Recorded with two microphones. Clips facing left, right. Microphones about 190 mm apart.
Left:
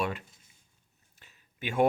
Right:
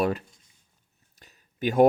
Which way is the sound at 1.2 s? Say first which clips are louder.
Right 11 dB; 40° right (ahead or behind).